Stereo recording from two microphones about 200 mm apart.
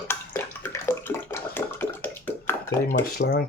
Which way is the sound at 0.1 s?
10° left (ahead or behind).